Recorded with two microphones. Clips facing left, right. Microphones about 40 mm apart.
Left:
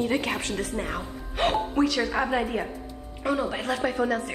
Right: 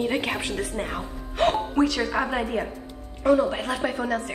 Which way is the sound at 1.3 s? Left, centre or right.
Centre.